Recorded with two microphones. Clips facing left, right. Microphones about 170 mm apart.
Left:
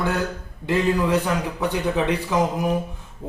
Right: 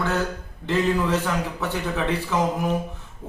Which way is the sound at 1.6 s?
15° left (ahead or behind).